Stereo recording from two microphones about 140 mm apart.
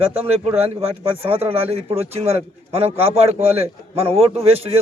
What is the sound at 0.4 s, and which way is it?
A man's voice, 45° right (ahead or behind).